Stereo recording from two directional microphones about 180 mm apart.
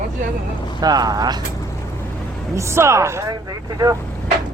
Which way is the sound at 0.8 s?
20° right (ahead or behind).